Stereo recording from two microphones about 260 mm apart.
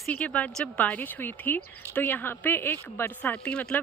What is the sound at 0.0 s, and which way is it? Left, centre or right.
A woman's voice, centre.